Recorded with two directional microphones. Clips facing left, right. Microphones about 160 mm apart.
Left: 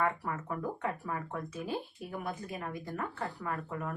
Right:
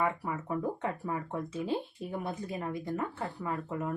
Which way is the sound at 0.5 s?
25° right (ahead or behind).